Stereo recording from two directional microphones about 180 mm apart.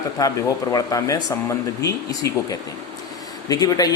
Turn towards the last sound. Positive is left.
turn(degrees=20)  # may be behind; listen again after turning